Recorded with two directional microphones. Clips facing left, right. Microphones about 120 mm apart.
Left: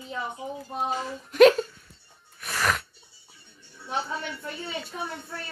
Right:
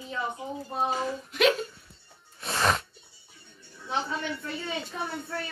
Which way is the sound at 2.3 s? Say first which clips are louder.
Right 1 dB; 25° right (ahead or behind).